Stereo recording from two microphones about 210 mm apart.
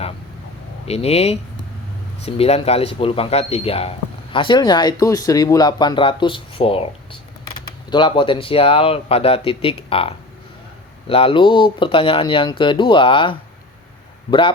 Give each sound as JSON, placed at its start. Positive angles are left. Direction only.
{"t": 0.9, "sound": "a man's voice", "side_deg": 30}